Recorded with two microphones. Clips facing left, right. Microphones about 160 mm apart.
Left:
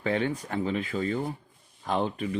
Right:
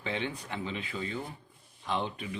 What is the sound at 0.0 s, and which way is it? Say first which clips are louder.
Speech: left 7 dB; 45° left (ahead or behind).